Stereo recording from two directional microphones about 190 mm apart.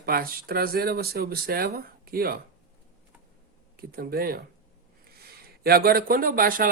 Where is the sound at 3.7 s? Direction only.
50° right (ahead or behind).